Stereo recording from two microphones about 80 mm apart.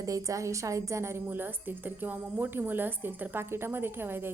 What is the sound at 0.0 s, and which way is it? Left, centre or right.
A woman's voice, right.